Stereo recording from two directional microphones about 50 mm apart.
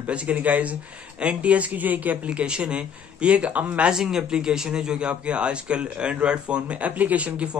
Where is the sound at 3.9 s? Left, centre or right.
Centre.